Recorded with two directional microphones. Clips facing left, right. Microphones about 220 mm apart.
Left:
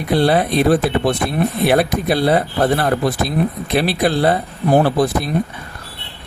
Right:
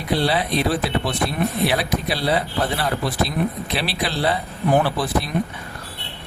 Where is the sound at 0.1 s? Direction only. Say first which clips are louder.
Left 6 dB; 50° left (ahead or behind).